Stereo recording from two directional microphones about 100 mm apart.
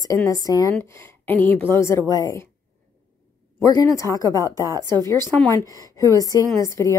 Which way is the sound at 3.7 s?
35° left (ahead or behind).